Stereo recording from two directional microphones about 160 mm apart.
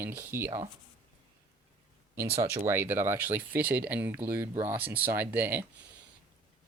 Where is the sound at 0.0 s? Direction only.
15° right (ahead or behind).